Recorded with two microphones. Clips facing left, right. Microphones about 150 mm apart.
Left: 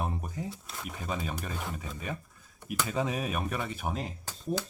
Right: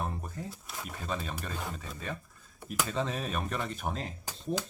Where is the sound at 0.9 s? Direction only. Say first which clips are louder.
Left 2 dB; 10° left (ahead or behind).